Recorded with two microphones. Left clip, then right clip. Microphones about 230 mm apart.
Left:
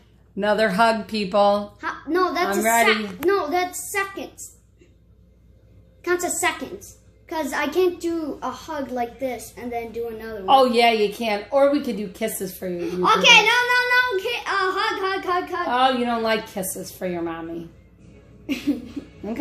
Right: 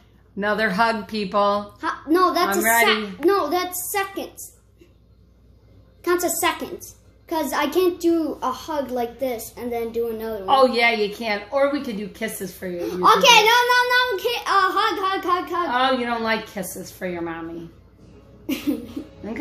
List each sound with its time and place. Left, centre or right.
0.4 s a woman's voice: left
1.8 s a sound: right
3.3 s a child's voice: right
6.0 s a child's voice: right
10.4 s a woman's voice: left
12.7 s a sound: right
15.7 s a woman's voice: left